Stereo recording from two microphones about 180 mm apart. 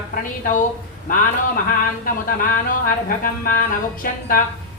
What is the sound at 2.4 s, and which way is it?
Speech, 50° left (ahead or behind).